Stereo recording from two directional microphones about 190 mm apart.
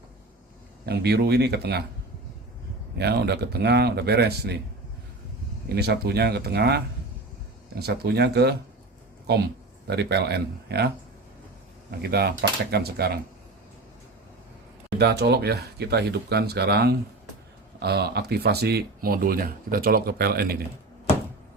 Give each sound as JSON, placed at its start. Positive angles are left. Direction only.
{"t": 0.9, "sound": "speech", "side_deg": -60}
{"t": 3.0, "sound": "speech", "side_deg": -60}
{"t": 5.6, "sound": "speech", "side_deg": -55}
{"t": 14.9, "sound": "speech", "side_deg": -60}